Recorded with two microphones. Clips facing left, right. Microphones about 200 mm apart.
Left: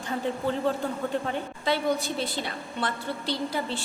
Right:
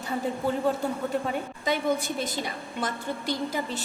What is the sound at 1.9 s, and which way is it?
Speech, 50° right (ahead or behind).